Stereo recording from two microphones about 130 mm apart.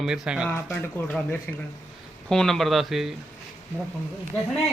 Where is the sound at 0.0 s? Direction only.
5° right (ahead or behind).